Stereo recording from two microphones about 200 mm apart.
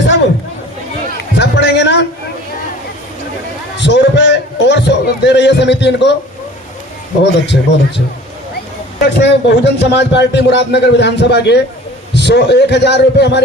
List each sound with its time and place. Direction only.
1.4 s a sound: 60° left (ahead or behind)
3.8 s music: 60° left (ahead or behind)
7.4 s a man's voice: 60° left (ahead or behind)
9.0 s a man's voice: 60° left (ahead or behind)